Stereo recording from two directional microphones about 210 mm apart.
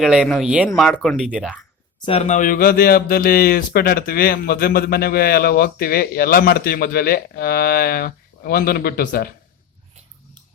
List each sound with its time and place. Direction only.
0.0 s speech: centre (ahead or behind)
2.0 s speech: 30° left (ahead or behind); by 9.3 s 45° left (ahead or behind)